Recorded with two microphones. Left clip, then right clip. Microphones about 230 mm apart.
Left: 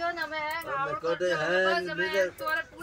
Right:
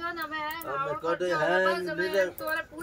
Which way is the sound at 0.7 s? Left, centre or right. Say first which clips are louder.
Right 2 dB; centre.